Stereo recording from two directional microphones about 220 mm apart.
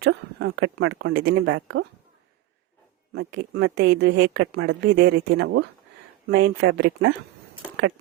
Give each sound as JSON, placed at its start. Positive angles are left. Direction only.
{"t": 0.0, "sound": "speech", "side_deg": -50}
{"t": 3.1, "sound": "speech", "side_deg": -50}